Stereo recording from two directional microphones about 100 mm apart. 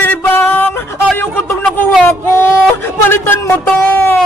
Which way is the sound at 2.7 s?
20° left (ahead or behind).